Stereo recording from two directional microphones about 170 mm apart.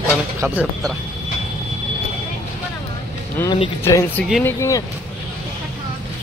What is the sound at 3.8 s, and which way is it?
Speech, 15° left (ahead or behind).